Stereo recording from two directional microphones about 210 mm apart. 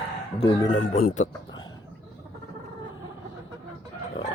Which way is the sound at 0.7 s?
40° left (ahead or behind).